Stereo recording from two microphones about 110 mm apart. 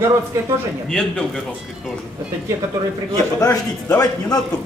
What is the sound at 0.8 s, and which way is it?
Speech, 5° left (ahead or behind).